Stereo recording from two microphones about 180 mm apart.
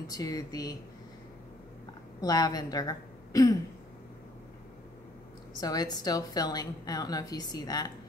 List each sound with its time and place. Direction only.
0.0 s a woman's voice: 20° left (ahead or behind)
2.2 s a woman's voice: 20° left (ahead or behind)
5.6 s a woman's voice: 20° left (ahead or behind)